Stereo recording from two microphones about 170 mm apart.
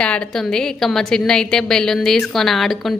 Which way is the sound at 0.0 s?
5° left (ahead or behind).